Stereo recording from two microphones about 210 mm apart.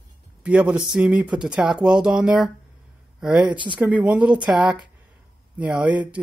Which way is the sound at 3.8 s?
5° right (ahead or behind).